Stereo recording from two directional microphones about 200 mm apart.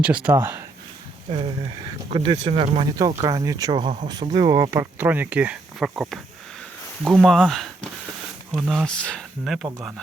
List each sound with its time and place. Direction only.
0.0 s speech: 5° right (ahead or behind)
1.3 s speech: 25° right (ahead or behind); by 9.9 s centre (ahead or behind)